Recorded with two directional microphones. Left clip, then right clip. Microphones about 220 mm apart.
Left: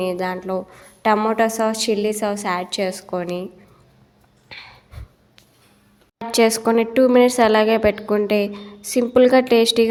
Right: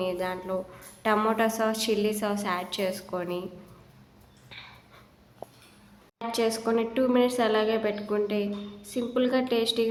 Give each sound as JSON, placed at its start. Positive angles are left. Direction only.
{"t": 0.0, "sound": "a woman's voice", "side_deg": 30}
{"t": 4.4, "sound": "dog", "side_deg": 30}
{"t": 6.1, "sound": "speech", "side_deg": 35}